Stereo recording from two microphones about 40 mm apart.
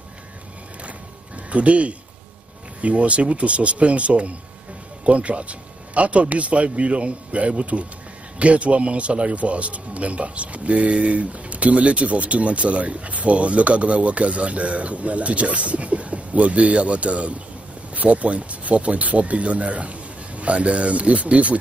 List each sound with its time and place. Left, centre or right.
1.5 s speech: right